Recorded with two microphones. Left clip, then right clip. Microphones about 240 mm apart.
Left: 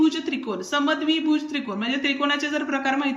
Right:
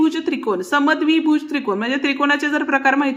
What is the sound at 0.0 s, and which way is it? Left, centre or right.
A woman's voice, centre.